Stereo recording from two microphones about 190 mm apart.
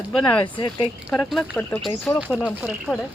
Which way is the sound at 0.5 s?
25° left (ahead or behind).